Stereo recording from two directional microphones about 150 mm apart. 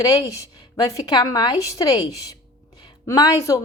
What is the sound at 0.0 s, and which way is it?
A woman's voice, 25° left (ahead or behind).